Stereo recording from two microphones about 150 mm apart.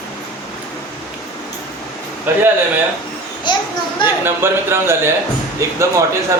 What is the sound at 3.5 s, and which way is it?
Speech, 30° left (ahead or behind).